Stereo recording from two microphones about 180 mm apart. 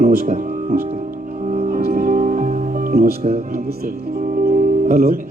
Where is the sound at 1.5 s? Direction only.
45° right (ahead or behind).